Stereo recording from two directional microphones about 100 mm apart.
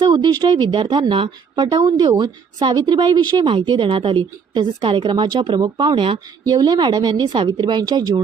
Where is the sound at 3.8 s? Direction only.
60° right (ahead or behind).